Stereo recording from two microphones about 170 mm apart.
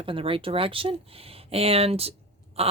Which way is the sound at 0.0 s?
30° right (ahead or behind).